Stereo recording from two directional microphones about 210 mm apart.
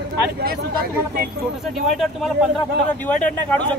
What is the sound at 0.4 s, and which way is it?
Speech, 45° right (ahead or behind).